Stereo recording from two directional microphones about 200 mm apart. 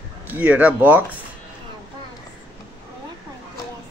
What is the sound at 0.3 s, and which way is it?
Speech, 5° right (ahead or behind).